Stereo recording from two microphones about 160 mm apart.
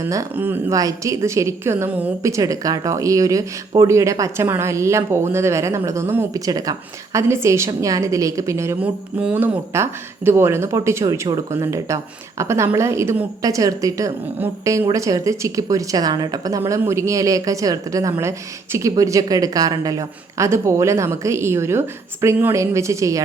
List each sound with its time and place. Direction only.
0.0 s a woman's voice: 20° right (ahead or behind)